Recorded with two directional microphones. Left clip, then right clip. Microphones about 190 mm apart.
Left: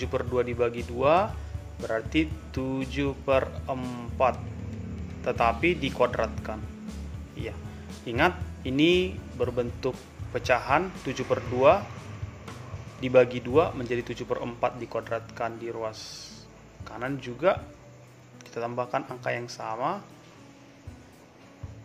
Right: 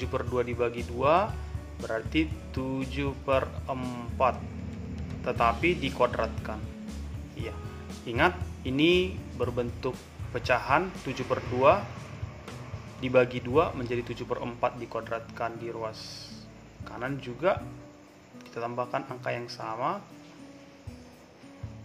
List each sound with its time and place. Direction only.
0.0 s a man's voice: 15° left (ahead or behind)
8.0 s a man's voice: 15° left (ahead or behind)
13.0 s a man's voice: 15° left (ahead or behind)